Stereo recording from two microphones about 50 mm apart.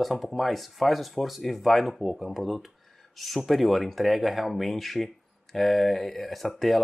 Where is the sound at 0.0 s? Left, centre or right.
Centre.